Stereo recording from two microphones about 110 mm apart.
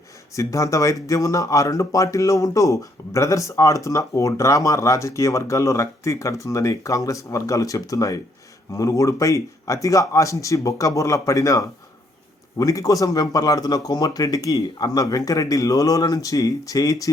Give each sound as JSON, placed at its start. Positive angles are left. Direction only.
{"t": 0.3, "sound": "speech", "side_deg": 30}